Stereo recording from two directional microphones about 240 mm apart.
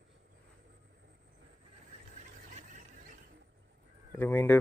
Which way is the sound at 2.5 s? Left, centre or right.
Right.